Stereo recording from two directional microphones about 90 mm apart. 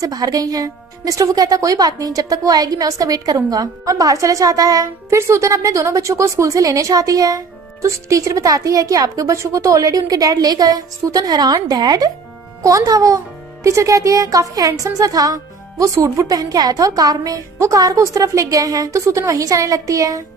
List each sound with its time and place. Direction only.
0.0 s speech: 45° right (ahead or behind)